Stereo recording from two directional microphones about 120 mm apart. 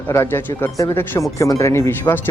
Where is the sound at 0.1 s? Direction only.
20° left (ahead or behind).